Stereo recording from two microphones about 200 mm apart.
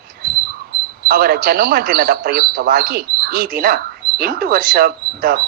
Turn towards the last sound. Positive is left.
turn(degrees=-50)  # may be behind; listen again after turning